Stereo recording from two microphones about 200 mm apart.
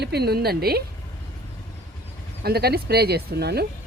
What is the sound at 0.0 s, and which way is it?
Speech, 55° right (ahead or behind).